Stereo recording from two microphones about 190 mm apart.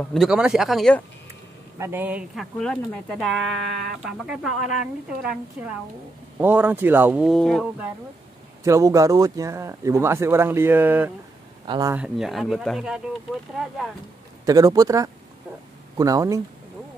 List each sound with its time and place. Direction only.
0.0 s speech: centre (ahead or behind)
1.8 s speech: 10° right (ahead or behind)
2.6 s speech: 5° left (ahead or behind)
8.6 s speech: 15° right (ahead or behind)
11.6 s speech: 25° right (ahead or behind)
11.9 s speech: 5° right (ahead or behind)
14.4 s speech: 20° right (ahead or behind)